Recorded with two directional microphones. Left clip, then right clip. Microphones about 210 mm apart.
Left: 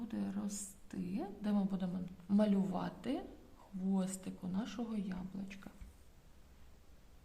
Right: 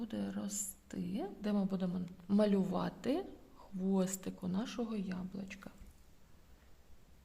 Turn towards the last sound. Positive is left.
turn(degrees=-35)  # may be behind; listen again after turning